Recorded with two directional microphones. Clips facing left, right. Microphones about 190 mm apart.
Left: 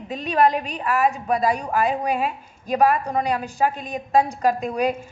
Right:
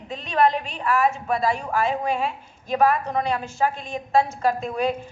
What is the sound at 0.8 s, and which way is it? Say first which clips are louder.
A woman's voice: even; 15° left (ahead or behind).